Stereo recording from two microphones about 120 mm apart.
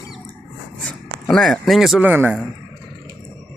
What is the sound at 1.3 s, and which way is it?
Speech, 5° left (ahead or behind).